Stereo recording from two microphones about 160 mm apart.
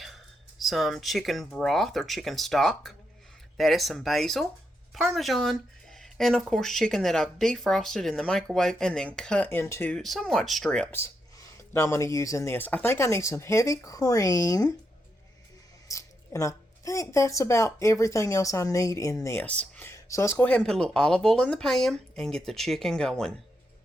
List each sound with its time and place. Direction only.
0.6 s speech: centre (ahead or behind); by 9.9 s 15° left (ahead or behind)
9.9 s speech: centre (ahead or behind); by 14.7 s 20° left (ahead or behind)
15.9 s speech: 20° left (ahead or behind); by 23.3 s 5° left (ahead or behind)